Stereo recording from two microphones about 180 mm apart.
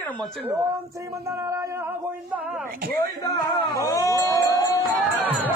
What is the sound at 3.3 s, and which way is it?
Music, 20° left (ahead or behind).